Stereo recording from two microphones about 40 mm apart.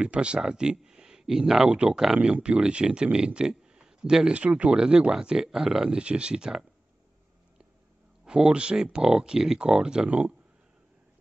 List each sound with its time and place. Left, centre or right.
0.0 s speech: right
0.4 s a sound: centre
1.2 s speech: centre
1.7 s speech: right
3.3 s a sound: right
4.3 s speech: right
4.7 s speech: right
5.9 s speech: right
8.3 s speech: right
10.0 s speech: right